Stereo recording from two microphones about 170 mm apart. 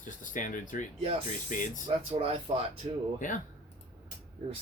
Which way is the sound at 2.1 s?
30° right (ahead or behind).